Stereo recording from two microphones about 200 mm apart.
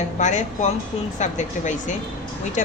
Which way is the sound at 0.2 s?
35° left (ahead or behind).